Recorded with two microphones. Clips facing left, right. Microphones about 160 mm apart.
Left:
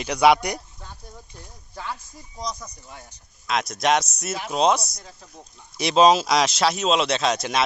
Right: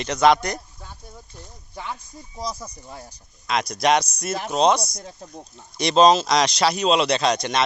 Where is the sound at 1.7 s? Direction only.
15° right (ahead or behind).